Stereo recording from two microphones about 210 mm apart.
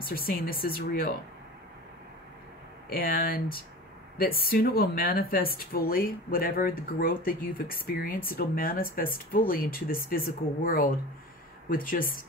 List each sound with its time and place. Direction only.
0.0 s speech: 45° left (ahead or behind)
2.9 s speech: 45° left (ahead or behind)